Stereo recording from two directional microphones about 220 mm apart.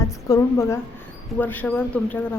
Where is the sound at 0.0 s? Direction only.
15° left (ahead or behind).